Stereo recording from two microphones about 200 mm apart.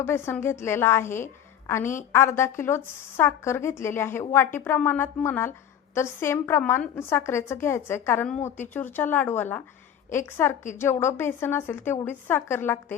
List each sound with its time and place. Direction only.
0.0 s speech: 10° left (ahead or behind)
1.8 s a woman's voice: 40° left (ahead or behind)
2.1 s speech: 15° left (ahead or behind)